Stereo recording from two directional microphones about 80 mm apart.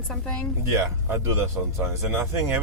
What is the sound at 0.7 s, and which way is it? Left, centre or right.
Speech, right.